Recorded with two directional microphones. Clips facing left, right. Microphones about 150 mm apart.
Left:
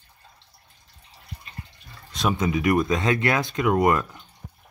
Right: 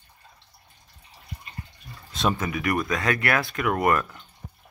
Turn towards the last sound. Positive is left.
turn(degrees=20)  # may be behind; listen again after turning